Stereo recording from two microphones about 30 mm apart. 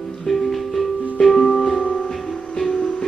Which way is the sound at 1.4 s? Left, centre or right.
Left.